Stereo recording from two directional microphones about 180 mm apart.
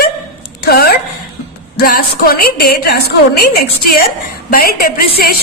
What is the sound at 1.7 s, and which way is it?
A woman's voice, 55° left (ahead or behind).